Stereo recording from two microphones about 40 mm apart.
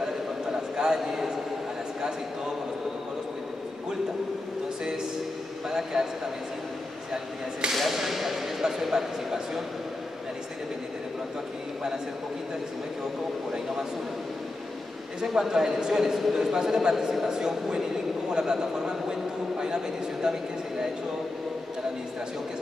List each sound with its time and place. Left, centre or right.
0.0 s a sound: centre
5.7 s a man's voice: centre
7.7 s speech: centre
15.2 s a man's voice: centre